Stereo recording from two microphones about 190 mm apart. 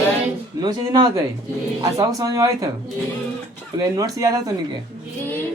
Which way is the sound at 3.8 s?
20° right (ahead or behind).